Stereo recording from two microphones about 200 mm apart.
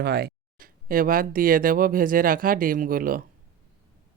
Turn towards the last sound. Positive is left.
turn(degrees=-45)  # may be behind; listen again after turning